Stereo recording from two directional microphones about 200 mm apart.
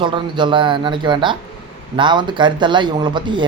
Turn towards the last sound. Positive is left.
turn(degrees=-25)  # may be behind; listen again after turning